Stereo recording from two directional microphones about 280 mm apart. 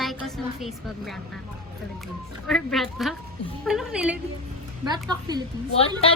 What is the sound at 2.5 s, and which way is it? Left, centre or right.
A woman's voice, centre.